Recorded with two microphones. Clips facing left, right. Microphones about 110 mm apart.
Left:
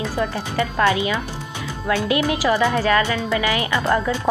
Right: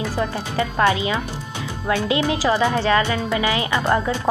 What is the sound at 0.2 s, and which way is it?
Speech, 30° right (ahead or behind).